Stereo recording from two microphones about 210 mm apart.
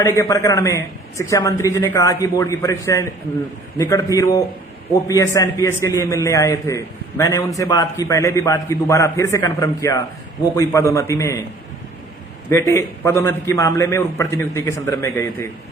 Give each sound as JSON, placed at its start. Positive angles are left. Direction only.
{"t": 0.0, "sound": "a man's voice", "side_deg": 15}
{"t": 12.5, "sound": "a man's voice", "side_deg": 15}